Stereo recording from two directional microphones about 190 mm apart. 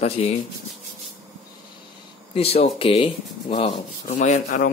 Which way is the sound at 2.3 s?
30° left (ahead or behind).